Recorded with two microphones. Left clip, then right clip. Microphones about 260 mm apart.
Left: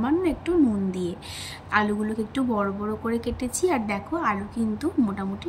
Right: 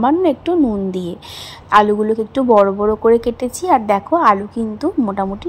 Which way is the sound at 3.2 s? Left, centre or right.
Centre.